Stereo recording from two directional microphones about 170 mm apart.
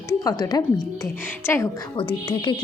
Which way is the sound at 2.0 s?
30° left (ahead or behind).